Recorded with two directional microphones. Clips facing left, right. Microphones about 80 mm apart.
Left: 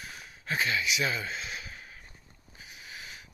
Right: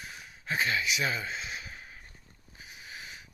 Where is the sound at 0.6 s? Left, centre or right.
Right.